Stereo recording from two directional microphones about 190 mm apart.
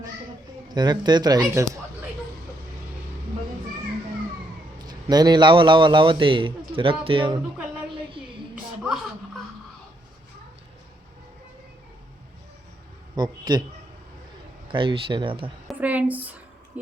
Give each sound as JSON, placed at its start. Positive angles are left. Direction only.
{"t": 0.7, "sound": "a man's voice", "side_deg": -20}
{"t": 4.9, "sound": "a man's voice", "side_deg": -20}
{"t": 7.9, "sound": "music", "side_deg": -25}
{"t": 13.1, "sound": "a man's voice", "side_deg": -20}
{"t": 14.7, "sound": "a man's voice", "side_deg": -25}
{"t": 15.6, "sound": "a woman's voice", "side_deg": -10}
{"t": 16.7, "sound": "a sound", "side_deg": -5}